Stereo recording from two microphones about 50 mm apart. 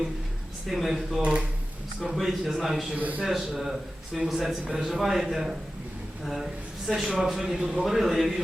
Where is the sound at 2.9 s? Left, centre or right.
Right.